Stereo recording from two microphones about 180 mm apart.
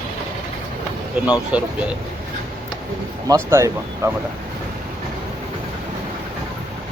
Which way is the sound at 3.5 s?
15° right (ahead or behind).